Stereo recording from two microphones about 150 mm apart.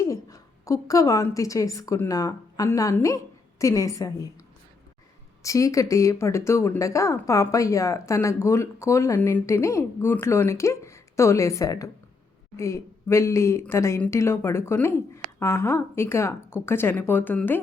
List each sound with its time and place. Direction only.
0.0 s a woman's voice: 20° left (ahead or behind)
5.4 s a woman's voice: 20° left (ahead or behind)